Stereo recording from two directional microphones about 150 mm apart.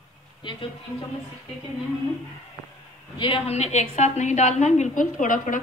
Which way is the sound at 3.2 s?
40° left (ahead or behind).